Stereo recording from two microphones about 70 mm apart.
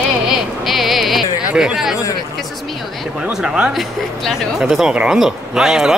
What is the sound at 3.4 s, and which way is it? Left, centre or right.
Speech, centre.